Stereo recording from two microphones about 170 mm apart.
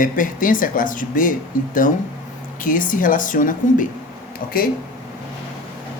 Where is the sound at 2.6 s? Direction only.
50° left (ahead or behind).